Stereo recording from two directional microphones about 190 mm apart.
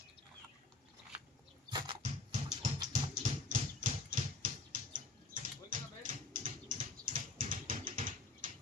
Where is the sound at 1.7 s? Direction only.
25° right (ahead or behind).